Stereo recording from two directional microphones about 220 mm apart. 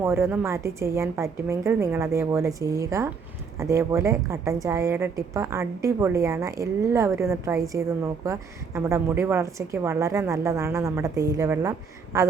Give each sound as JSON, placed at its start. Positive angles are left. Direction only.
{"t": 0.0, "sound": "a woman's voice", "side_deg": -10}